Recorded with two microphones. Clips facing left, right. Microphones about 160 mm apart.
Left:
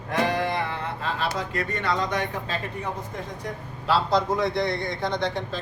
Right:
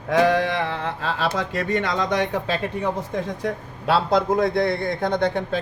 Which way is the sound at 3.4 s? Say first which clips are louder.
Right 4 dB; 60° right (ahead or behind).